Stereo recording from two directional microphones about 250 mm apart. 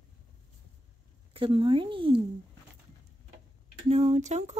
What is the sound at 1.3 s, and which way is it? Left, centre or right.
Speech, right.